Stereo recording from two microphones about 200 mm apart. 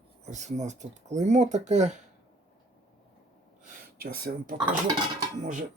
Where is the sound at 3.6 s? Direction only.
50° right (ahead or behind).